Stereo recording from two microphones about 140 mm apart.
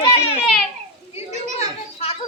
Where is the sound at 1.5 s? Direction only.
45° left (ahead or behind).